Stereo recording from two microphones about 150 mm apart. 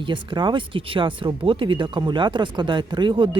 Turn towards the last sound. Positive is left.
turn(degrees=-30)  # may be behind; listen again after turning